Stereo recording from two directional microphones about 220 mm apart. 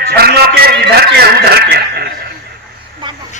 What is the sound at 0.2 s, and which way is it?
A man's voice, 45° right (ahead or behind).